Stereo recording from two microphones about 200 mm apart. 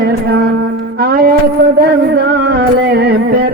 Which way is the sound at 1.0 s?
50° right (ahead or behind).